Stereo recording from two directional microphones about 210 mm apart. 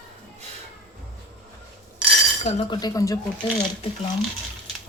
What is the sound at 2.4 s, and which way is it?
Speech, 30° left (ahead or behind).